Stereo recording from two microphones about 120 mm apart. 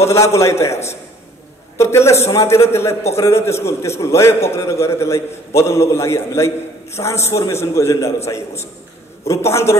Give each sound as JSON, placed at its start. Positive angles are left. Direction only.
{"t": 0.0, "sound": "a man's voice", "side_deg": 25}
{"t": 1.8, "sound": "a man's voice", "side_deg": 20}